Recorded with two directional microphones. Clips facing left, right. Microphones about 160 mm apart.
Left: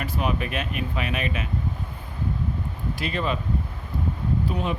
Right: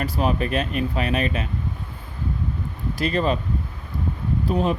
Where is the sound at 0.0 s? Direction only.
35° right (ahead or behind).